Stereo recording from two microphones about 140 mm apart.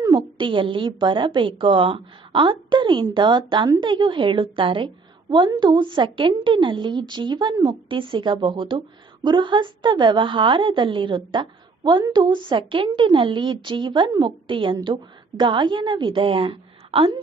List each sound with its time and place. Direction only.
0.4 s a woman's voice: 35° right (ahead or behind)